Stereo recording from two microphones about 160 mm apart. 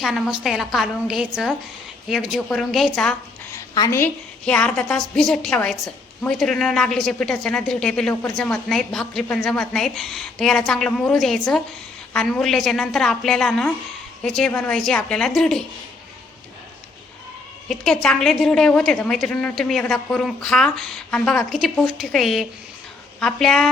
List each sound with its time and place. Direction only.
0.0 s a woman's voice: centre (ahead or behind)
3.5 s a sound: 20° left (ahead or behind)
4.4 s a woman's voice: 5° left (ahead or behind)
17.7 s a woman's voice: 5° left (ahead or behind)